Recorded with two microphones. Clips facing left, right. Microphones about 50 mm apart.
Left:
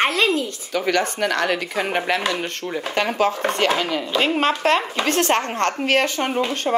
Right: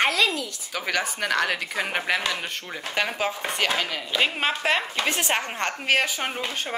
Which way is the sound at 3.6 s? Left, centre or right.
Centre.